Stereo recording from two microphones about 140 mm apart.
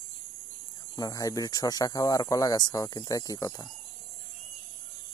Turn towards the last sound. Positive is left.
turn(degrees=25)  # may be behind; listen again after turning